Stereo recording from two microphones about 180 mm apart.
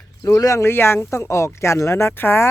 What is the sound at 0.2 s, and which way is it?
Speech, 20° left (ahead or behind).